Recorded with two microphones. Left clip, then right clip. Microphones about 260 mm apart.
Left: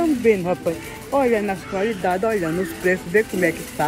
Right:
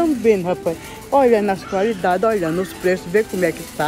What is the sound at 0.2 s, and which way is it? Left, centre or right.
Speech, centre.